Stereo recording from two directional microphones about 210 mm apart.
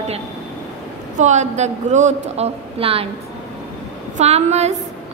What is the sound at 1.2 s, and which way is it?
A woman's voice, 35° right (ahead or behind).